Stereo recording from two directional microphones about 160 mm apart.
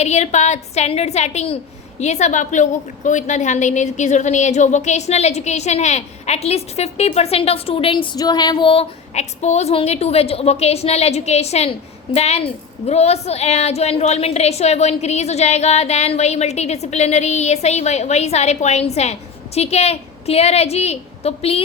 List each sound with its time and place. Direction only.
0.0 s a woman's voice: 45° left (ahead or behind)